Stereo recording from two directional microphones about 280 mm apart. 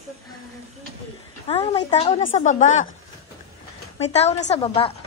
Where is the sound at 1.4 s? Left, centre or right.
Centre.